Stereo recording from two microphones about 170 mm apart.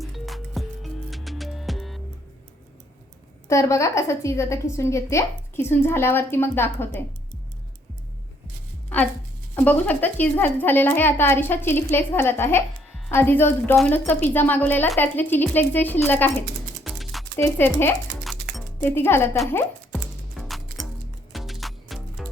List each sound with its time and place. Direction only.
0.0 s music: centre (ahead or behind)
3.5 s a woman's voice: 15° left (ahead or behind)
8.9 s a sound: 10° left (ahead or behind)
9.6 s a woman's voice: 10° left (ahead or behind)
16.8 s music: centre (ahead or behind)
17.3 s a woman's voice: 15° left (ahead or behind)
20.4 s music: centre (ahead or behind)